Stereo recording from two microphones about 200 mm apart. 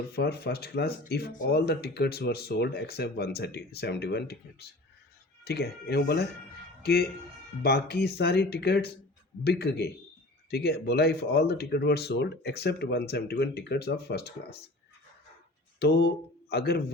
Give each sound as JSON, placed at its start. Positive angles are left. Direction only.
{"t": 0.1, "sound": "speech", "side_deg": 50}
{"t": 5.5, "sound": "speech", "side_deg": 55}
{"t": 15.8, "sound": "speech", "side_deg": 55}